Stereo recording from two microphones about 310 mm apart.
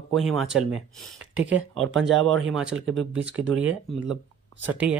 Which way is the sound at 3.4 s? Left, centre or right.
Right.